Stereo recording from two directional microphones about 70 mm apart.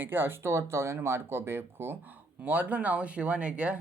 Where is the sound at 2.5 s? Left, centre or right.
Right.